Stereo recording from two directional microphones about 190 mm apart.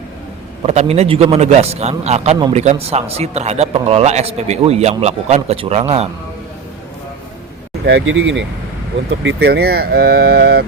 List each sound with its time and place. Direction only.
0.6 s a man's voice: 35° right (ahead or behind)
7.9 s speech: 80° right
9.2 s speech: 60° right (ahead or behind)